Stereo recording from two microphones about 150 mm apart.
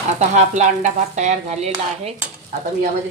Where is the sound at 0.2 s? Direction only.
50° right (ahead or behind).